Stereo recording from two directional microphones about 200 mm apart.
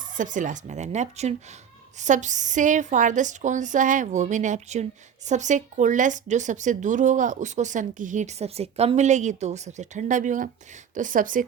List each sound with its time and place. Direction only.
0.2 s speech: 40° right (ahead or behind)